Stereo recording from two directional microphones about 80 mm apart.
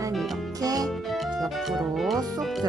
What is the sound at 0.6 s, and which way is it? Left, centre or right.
Music, right.